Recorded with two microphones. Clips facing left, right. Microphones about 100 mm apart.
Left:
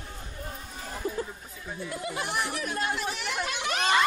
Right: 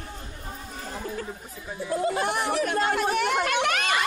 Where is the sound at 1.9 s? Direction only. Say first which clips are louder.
Right 11 dB; 35° right (ahead or behind).